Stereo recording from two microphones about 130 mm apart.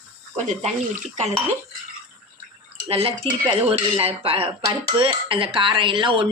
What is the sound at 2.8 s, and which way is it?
Speech, 45° right (ahead or behind).